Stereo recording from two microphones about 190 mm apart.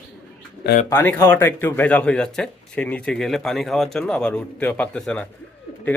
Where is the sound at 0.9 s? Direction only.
15° left (ahead or behind).